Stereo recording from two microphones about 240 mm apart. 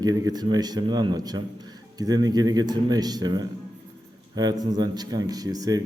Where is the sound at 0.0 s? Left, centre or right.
Centre.